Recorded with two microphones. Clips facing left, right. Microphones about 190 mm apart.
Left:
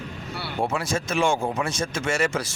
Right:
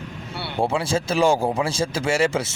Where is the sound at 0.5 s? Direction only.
30° right (ahead or behind).